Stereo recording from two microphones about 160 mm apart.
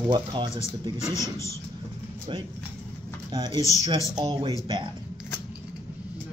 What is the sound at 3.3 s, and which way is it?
Speech, 25° right (ahead or behind).